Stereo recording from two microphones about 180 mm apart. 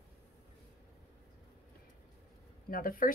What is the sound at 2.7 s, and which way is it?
Speech, 50° left (ahead or behind).